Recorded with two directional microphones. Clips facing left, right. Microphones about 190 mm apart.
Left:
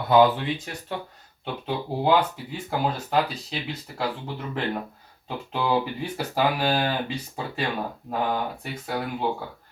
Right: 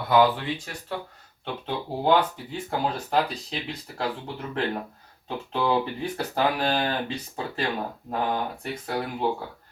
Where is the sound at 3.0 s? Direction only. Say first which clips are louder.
Left 1 dB; centre (ahead or behind).